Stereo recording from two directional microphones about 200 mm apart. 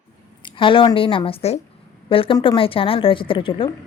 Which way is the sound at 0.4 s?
25° left (ahead or behind).